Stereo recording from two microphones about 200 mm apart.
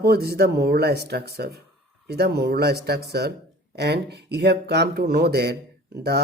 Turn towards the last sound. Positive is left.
turn(degrees=-50)  # may be behind; listen again after turning